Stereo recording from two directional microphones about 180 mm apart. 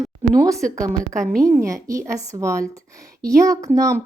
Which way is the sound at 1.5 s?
15° right (ahead or behind).